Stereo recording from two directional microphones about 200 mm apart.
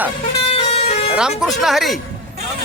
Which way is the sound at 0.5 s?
30° left (ahead or behind).